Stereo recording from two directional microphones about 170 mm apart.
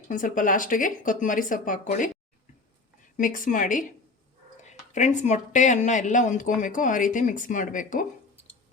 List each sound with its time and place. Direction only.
0.1 s speech: 50° left (ahead or behind)
3.2 s speech: 50° left (ahead or behind)